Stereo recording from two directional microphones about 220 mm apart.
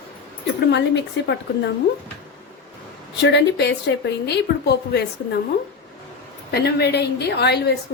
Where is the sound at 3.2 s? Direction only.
50° left (ahead or behind).